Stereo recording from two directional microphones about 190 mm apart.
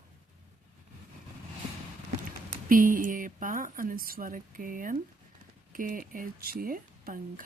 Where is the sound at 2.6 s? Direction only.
45° right (ahead or behind).